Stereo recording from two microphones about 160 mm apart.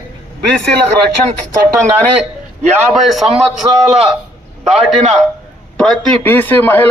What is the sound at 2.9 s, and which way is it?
A man's voice, centre (ahead or behind).